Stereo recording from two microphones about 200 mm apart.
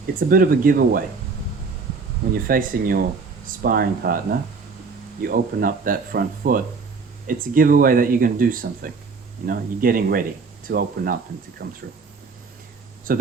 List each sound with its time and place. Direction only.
0.3 s speech: 45° right (ahead or behind)
2.3 s speech: 45° right (ahead or behind)
13.1 s speech: 45° right (ahead or behind)